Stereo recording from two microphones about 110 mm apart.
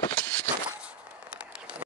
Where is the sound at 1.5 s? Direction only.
10° right (ahead or behind).